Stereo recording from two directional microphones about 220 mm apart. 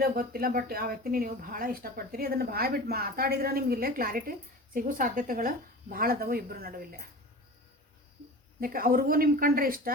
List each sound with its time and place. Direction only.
0.0 s speech: 45° right (ahead or behind)
8.6 s speech: 40° right (ahead or behind)